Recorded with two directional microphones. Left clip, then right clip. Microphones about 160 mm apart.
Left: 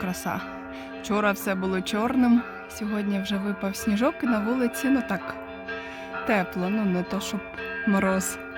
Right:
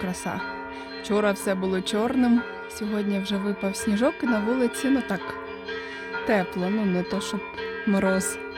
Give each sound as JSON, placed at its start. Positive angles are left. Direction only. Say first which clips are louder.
{"t": 0.0, "sound": "speech", "louder": "even", "side_deg": -5}
{"t": 6.2, "sound": "speech", "louder": "right 1 dB", "side_deg": -10}